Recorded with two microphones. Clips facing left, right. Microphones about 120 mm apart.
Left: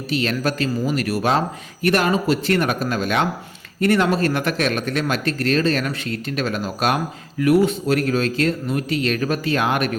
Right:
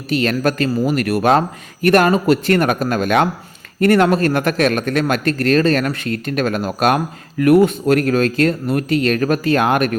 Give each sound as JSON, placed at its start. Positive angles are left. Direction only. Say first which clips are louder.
{"t": 0.1, "sound": "speech", "louder": "right 5 dB", "side_deg": -50}